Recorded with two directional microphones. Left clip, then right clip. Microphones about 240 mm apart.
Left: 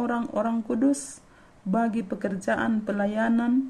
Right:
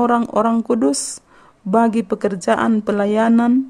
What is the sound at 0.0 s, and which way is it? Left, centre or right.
Speech, right.